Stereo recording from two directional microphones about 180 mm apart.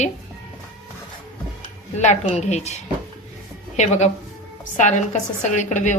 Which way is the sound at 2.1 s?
40° left (ahead or behind).